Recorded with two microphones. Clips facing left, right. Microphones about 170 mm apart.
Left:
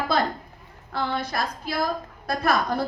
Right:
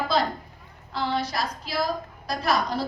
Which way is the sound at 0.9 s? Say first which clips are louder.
Even; 55° left (ahead or behind).